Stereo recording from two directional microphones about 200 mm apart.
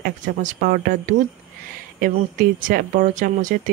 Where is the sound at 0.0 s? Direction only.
40° right (ahead or behind).